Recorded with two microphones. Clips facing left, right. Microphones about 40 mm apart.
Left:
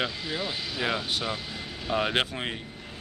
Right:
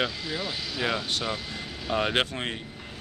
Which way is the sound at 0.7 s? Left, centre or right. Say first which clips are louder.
Right 1 dB; centre.